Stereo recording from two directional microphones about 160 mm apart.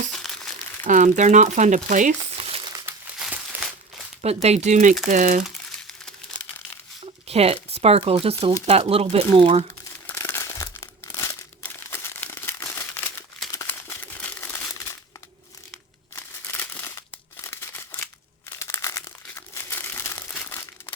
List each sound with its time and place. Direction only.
0.1 s crumpling: centre (ahead or behind)
0.9 s speech: 50° right (ahead or behind)
3.2 s crumpling: 5° right (ahead or behind)
4.2 s speech: 40° right (ahead or behind)
7.0 s speech: 40° right (ahead or behind)
10.2 s crumpling: 15° left (ahead or behind)
16.1 s crumpling: 10° left (ahead or behind)
17.4 s scissors: 15° left (ahead or behind)
18.6 s crumpling: 15° left (ahead or behind)